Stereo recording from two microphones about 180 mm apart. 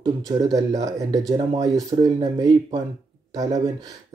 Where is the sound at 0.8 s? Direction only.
20° right (ahead or behind).